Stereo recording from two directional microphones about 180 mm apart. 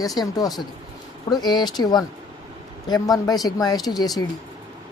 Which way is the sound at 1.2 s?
20° left (ahead or behind).